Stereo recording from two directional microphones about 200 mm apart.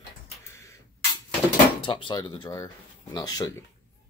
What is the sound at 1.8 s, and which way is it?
Speech, 25° left (ahead or behind).